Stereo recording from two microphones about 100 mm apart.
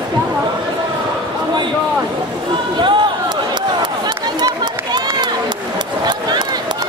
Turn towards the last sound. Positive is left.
turn(degrees=-45)  # may be behind; listen again after turning